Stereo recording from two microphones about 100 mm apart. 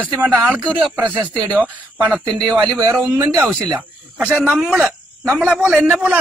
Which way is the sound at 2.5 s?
5° left (ahead or behind).